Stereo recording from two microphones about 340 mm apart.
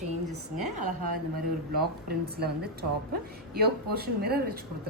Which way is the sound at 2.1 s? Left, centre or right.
Right.